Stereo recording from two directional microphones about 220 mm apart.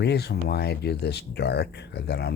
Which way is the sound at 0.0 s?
50° left (ahead or behind).